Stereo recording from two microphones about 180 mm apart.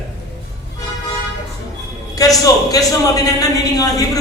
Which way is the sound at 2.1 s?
20° left (ahead or behind).